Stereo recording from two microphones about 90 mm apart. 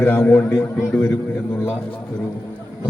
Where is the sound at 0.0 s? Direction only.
25° left (ahead or behind).